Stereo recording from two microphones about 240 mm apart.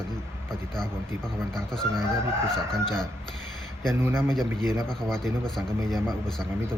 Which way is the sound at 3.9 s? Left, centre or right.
Centre.